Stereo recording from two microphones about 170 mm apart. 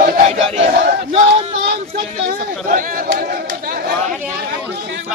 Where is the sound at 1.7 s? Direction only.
60° right (ahead or behind).